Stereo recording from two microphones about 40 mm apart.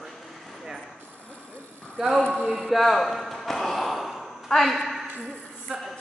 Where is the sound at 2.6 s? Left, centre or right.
Centre.